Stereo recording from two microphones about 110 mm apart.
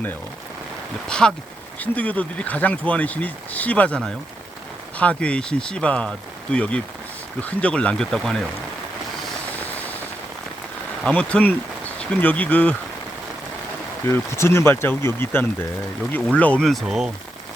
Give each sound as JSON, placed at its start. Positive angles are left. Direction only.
{"t": 1.0, "sound": "speech", "side_deg": 5}
{"t": 11.0, "sound": "speech", "side_deg": 10}
{"t": 14.1, "sound": "speech", "side_deg": 25}
{"t": 16.6, "sound": "speech", "side_deg": 0}